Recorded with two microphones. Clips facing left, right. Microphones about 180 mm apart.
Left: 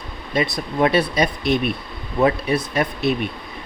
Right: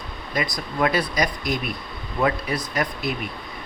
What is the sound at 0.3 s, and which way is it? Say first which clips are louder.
Speech: left 5 dB; 25° left (ahead or behind).